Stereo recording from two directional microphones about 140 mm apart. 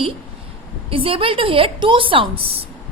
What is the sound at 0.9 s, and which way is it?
A woman's voice, 40° right (ahead or behind).